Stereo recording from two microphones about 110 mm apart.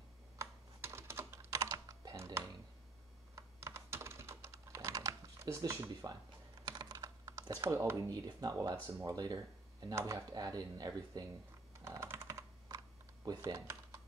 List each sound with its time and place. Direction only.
0.4 s computer keyboard: 25° right (ahead or behind)
1.6 s typing: 35° right (ahead or behind)
3.3 s computer keyboard: 25° right (ahead or behind)
6.6 s typing: 40° right (ahead or behind)
7.6 s speech: 25° right (ahead or behind)
11.7 s computer keyboard: 25° right (ahead or behind)
12.6 s computer keyboard: 40° right (ahead or behind)